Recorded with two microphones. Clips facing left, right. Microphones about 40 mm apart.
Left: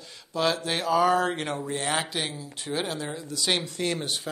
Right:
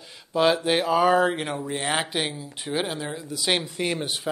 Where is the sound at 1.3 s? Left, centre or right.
Centre.